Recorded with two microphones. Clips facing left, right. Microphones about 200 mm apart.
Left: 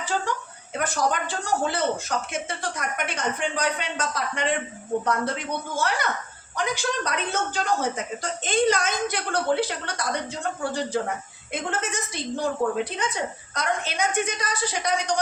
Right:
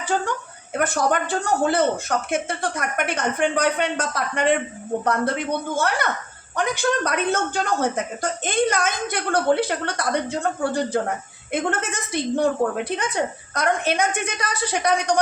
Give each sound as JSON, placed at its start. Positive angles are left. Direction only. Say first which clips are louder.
{"t": 0.1, "sound": "a woman's voice", "louder": "right 4 dB", "side_deg": -50}